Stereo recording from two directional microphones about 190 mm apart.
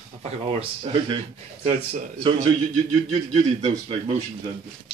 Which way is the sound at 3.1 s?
35° right (ahead or behind).